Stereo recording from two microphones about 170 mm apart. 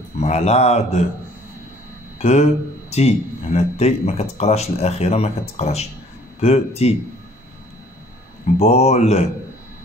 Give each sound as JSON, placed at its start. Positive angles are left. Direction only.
{"t": 0.2, "sound": "speech", "side_deg": 40}
{"t": 2.1, "sound": "speech", "side_deg": 40}
{"t": 8.5, "sound": "speech", "side_deg": 40}